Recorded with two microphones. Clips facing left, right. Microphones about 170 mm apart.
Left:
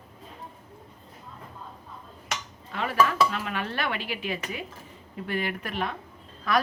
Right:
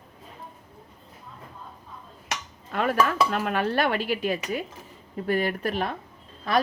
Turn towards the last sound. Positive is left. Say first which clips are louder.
# right 2 dB
turn(degrees=-30)  # may be behind; listen again after turning